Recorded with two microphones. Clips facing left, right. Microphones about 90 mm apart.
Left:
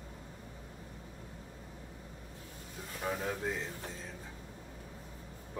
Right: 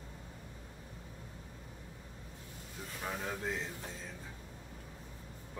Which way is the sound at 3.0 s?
5° left (ahead or behind).